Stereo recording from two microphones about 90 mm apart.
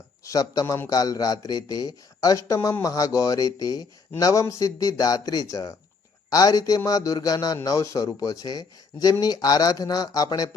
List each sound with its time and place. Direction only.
0.3 s a man's voice: 40° left (ahead or behind)